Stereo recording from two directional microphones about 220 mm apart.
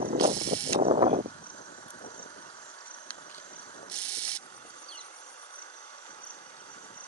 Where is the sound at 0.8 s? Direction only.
30° right (ahead or behind).